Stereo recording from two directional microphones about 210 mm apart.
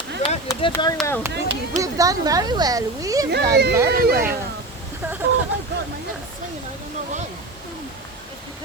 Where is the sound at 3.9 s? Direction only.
45° right (ahead or behind).